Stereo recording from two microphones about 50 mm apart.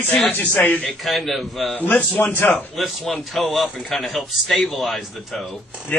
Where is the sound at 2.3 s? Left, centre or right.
Left.